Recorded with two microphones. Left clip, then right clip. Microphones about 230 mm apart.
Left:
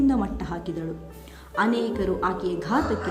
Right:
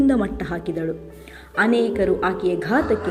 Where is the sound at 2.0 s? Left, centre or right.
Left.